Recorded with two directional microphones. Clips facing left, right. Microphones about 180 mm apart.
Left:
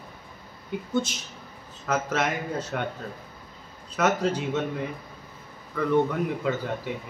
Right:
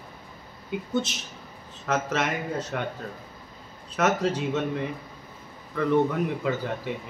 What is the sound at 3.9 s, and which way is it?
Speech, centre (ahead or behind).